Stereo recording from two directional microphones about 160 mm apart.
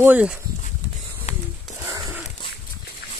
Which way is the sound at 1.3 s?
45° left (ahead or behind).